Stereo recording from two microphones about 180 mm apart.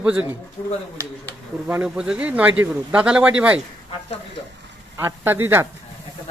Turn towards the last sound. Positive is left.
turn(degrees=-10)  # may be behind; listen again after turning